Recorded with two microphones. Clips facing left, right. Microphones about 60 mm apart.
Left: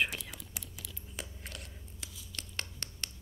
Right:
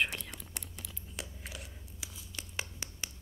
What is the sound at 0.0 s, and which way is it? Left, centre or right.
Whispering, centre.